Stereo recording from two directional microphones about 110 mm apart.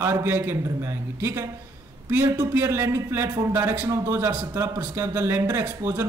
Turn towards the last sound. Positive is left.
turn(degrees=-25)  # may be behind; listen again after turning